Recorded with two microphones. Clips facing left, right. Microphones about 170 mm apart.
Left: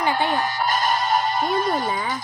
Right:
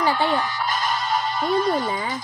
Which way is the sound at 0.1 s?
45° left (ahead or behind).